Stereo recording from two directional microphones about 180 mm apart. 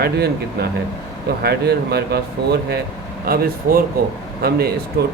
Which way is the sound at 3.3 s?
55° right (ahead or behind).